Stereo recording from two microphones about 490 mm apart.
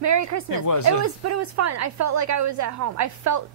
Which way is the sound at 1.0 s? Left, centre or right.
Right.